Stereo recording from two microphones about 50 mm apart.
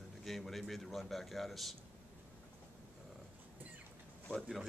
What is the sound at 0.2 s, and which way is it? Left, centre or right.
A man's voice, centre.